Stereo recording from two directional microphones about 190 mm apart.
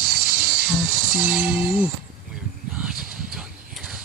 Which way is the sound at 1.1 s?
10° right (ahead or behind).